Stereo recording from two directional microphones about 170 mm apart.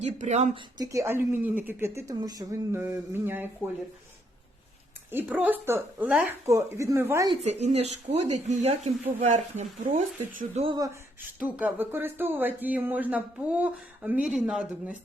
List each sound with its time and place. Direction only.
0.0 s speech: 40° right (ahead or behind)
0.5 s speech: 20° right (ahead or behind)
5.1 s speech: 10° right (ahead or behind)
6.5 s speech: 15° right (ahead or behind)
7.4 s speech: 40° right (ahead or behind)
11.3 s speech: 10° right (ahead or behind)